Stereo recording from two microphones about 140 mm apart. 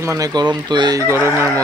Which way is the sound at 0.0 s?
25° right (ahead or behind).